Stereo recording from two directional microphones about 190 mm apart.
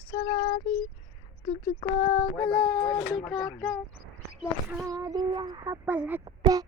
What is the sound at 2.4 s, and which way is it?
Speech, 5° left (ahead or behind).